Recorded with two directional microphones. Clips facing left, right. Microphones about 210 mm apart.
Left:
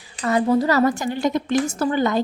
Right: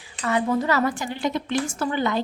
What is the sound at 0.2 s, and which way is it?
A woman's voice, 35° left (ahead or behind).